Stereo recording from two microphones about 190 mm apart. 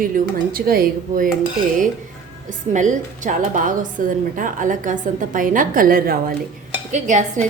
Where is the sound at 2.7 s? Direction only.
40° right (ahead or behind).